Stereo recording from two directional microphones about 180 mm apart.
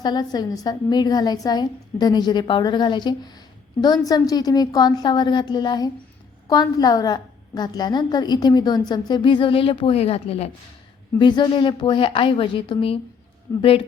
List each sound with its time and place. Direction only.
0.0 s a woman's voice: 25° left (ahead or behind)